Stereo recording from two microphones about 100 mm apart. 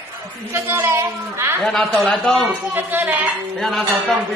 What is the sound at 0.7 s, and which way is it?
Speech, 25° right (ahead or behind).